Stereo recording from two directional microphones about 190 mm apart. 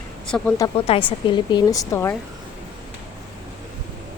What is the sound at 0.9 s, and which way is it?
A woman's voice, 30° left (ahead or behind).